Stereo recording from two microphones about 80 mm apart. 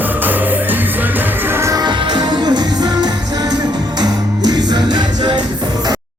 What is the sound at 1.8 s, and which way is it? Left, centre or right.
Music, right.